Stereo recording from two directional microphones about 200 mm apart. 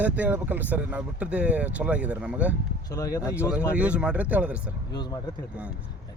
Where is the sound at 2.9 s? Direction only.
15° left (ahead or behind).